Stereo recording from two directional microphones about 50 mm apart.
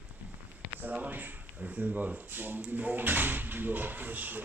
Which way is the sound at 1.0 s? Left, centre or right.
Right.